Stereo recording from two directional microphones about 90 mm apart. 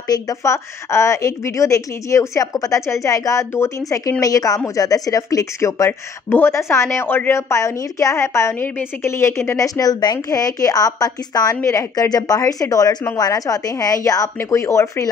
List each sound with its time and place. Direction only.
0.1 s a woman's voice: 40° left (ahead or behind)
5.9 s speech: 25° left (ahead or behind)
9.6 s a woman's voice: 45° left (ahead or behind)